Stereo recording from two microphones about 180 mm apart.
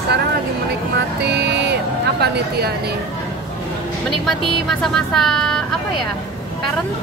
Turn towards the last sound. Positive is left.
turn(degrees=5)  # may be behind; listen again after turning